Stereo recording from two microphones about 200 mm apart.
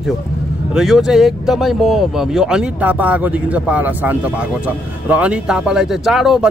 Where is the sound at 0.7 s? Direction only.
Centre (ahead or behind).